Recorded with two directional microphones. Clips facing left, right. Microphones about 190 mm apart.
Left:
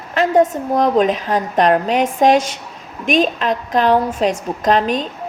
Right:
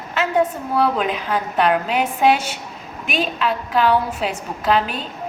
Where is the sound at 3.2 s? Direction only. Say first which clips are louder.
Left 4 dB; 40° left (ahead or behind).